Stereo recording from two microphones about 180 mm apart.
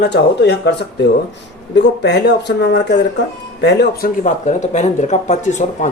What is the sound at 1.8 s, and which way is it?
Speech, 70° left (ahead or behind).